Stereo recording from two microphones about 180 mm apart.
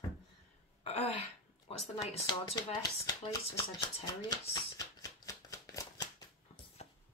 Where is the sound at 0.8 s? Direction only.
35° left (ahead or behind).